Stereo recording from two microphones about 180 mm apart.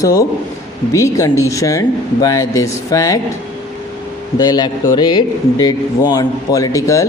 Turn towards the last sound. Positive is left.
turn(degrees=20)  # may be behind; listen again after turning